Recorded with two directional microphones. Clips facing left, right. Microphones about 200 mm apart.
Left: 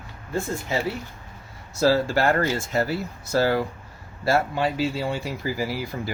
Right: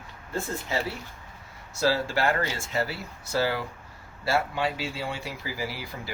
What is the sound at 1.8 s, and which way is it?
Speech, 45° left (ahead or behind).